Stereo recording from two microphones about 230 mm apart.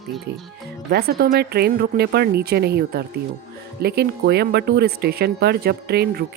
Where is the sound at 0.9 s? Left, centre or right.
Right.